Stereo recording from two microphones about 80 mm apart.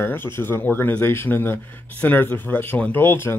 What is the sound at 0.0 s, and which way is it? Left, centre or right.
Speech, left.